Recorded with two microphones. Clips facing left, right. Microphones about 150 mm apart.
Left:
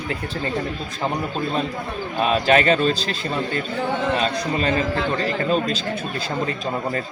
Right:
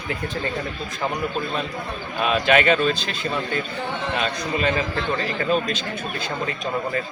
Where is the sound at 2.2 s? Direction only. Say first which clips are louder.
Left 1 dB; 35° left (ahead or behind).